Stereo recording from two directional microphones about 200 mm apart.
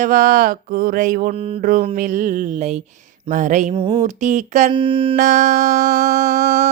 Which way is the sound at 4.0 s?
35° right (ahead or behind).